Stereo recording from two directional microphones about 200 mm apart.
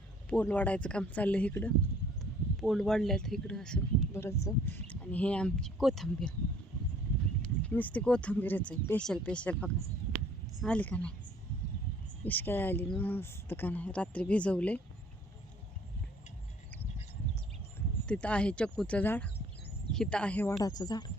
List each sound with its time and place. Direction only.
0.3 s speech: 5° left (ahead or behind)
7.4 s speech: 5° left (ahead or behind)
12.2 s speech: 10° left (ahead or behind)
17.7 s speech: 5° left (ahead or behind)
20.7 s speech: 20° left (ahead or behind)